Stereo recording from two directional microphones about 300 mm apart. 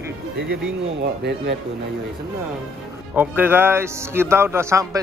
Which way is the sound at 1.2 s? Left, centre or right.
Right.